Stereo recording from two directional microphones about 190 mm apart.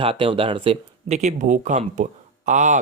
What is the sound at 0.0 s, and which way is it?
Speech, 30° right (ahead or behind).